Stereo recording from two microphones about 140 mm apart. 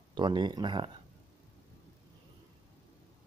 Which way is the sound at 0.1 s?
30° right (ahead or behind).